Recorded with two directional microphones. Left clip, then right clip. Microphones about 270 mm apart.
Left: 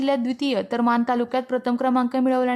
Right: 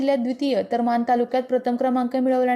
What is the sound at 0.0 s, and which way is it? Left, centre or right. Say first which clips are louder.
A woman's voice: right 1 dB; centre.